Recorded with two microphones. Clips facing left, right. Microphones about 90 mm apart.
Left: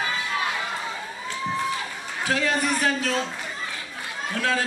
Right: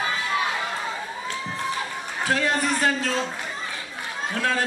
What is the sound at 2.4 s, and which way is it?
Speech, 20° right (ahead or behind).